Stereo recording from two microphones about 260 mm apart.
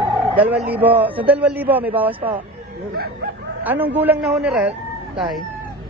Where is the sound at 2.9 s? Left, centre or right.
Right.